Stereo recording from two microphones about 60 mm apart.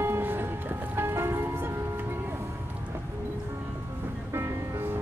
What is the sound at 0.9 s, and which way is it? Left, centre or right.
Church bell, right.